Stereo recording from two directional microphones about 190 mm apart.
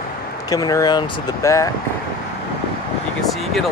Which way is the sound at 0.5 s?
20° left (ahead or behind).